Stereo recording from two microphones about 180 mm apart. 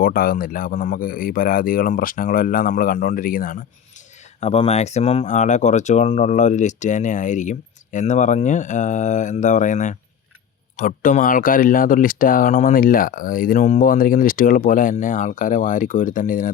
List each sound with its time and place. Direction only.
0.0 s speech: 55° left (ahead or behind)
4.4 s speech: 35° left (ahead or behind)